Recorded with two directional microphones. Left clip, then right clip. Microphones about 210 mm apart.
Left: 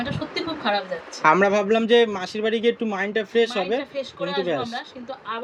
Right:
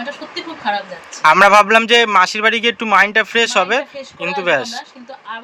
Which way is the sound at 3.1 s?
Centre (ahead or behind).